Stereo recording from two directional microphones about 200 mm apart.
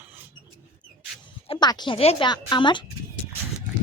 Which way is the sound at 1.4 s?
25° left (ahead or behind).